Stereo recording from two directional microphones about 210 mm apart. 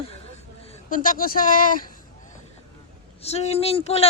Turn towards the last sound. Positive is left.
turn(degrees=30)  # may be behind; listen again after turning